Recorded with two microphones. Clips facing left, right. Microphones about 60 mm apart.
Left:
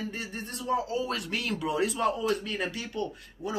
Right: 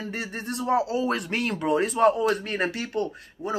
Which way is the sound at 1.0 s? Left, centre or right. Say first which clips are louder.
Right 5 dB; right.